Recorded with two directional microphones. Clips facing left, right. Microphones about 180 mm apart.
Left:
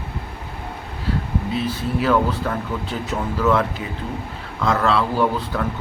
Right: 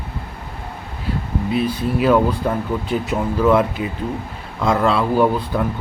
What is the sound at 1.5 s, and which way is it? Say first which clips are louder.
Speech: right 5 dB; 15° right (ahead or behind).